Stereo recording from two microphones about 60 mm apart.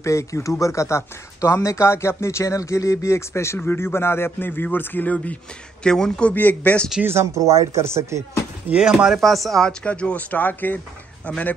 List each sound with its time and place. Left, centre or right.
0.0 s a man's voice: left
5.9 s a man's voice: centre
6.3 s speech: left
7.1 s speech: right
8.8 s speech: centre
9.8 s speech: left